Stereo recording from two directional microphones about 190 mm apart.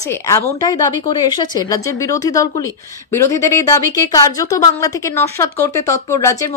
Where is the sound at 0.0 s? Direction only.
15° left (ahead or behind).